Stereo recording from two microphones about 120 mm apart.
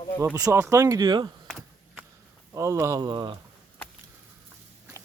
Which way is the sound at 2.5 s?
25° right (ahead or behind).